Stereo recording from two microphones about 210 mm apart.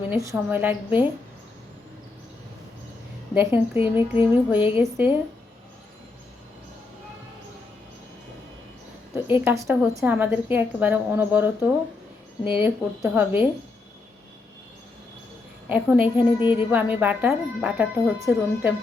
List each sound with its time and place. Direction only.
0.1 s a woman's voice: 10° right (ahead or behind)
3.3 s a woman's voice: 10° right (ahead or behind)
9.2 s a woman's voice: 10° right (ahead or behind)
12.5 s a woman's voice: 10° right (ahead or behind)
15.7 s a woman's voice: 5° right (ahead or behind)